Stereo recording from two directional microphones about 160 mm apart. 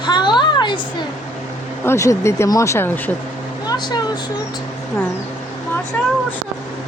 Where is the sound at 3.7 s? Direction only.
25° left (ahead or behind).